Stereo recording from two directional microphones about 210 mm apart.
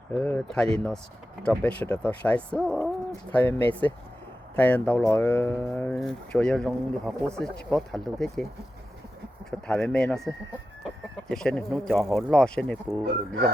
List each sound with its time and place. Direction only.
0.1 s speech: 5° left (ahead or behind)
9.5 s speech: 5° left (ahead or behind)
11.3 s speech: 5° left (ahead or behind)